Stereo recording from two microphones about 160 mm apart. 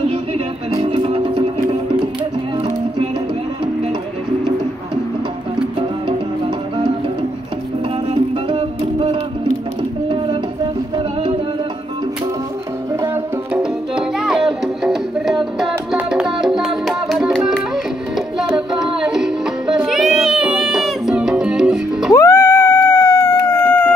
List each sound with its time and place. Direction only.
0.7 s music: 35° right (ahead or behind)
8.1 s music: 35° right (ahead or behind)
13.0 s music: 10° right (ahead or behind)
22.1 s howl: 15° left (ahead or behind)